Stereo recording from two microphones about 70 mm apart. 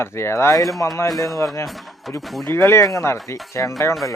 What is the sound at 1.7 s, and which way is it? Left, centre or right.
Speech, centre.